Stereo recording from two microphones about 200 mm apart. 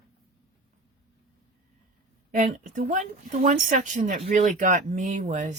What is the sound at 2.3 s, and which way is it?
Speech, 40° right (ahead or behind).